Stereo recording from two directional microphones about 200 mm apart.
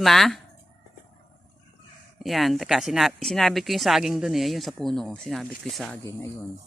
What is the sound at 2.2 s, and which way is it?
Speech, centre (ahead or behind).